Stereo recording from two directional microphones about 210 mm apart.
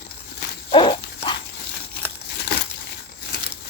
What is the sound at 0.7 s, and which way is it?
Dog, 20° left (ahead or behind).